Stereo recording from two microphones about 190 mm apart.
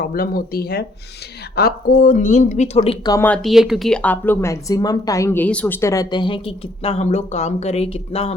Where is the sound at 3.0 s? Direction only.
15° left (ahead or behind).